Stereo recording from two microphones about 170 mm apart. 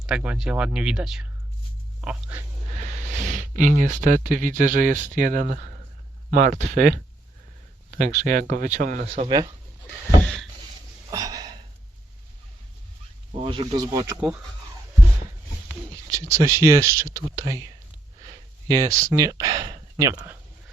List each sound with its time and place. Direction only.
0.0 s speech: 5° right (ahead or behind)
2.7 s speech: 45° right (ahead or behind)
9.0 s speech: 35° right (ahead or behind)
9.8 s a sound: 5° left (ahead or behind)
11.1 s a sound: 20° right (ahead or behind)
13.4 s speech: 30° right (ahead or behind)
14.2 s speech: 10° right (ahead or behind)
16.0 s speech: 20° right (ahead or behind)
18.2 s a sound: 20° right (ahead or behind)